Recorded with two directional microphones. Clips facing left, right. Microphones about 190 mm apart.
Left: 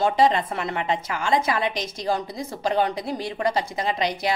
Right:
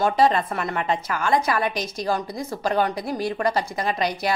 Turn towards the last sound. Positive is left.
turn(degrees=20)  # may be behind; listen again after turning